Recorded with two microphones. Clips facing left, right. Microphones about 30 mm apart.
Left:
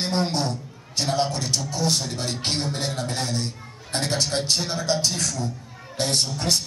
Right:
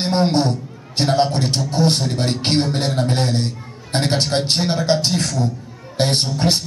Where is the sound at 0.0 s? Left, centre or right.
Right.